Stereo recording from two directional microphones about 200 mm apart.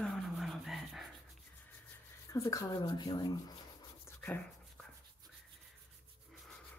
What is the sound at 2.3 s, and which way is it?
Speech, 15° left (ahead or behind).